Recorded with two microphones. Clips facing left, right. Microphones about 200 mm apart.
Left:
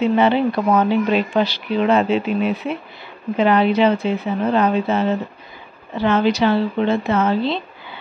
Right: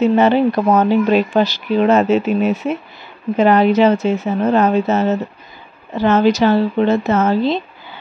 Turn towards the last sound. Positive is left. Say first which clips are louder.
# right 3 dB
turn(degrees=-45)  # may be behind; listen again after turning